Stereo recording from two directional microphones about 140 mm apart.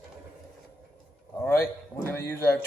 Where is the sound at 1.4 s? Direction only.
20° left (ahead or behind).